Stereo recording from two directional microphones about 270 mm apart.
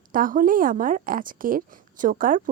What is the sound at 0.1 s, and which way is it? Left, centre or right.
A woman's voice, right.